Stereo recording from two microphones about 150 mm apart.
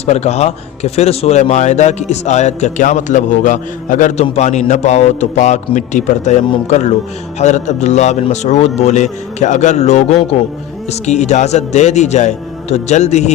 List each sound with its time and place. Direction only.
0.0 s speech: 45° left (ahead or behind)